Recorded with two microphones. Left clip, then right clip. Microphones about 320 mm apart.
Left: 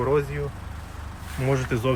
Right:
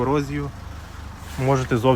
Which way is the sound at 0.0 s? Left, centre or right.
Centre.